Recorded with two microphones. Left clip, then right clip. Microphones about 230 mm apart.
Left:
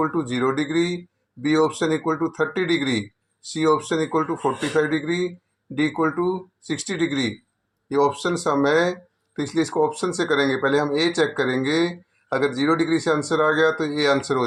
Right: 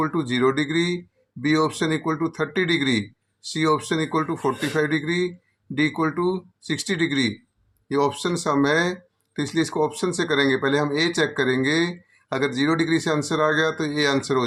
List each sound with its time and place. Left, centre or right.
0.0 s speech: right